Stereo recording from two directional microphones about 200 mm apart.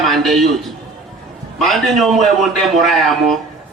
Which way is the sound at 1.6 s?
Centre (ahead or behind).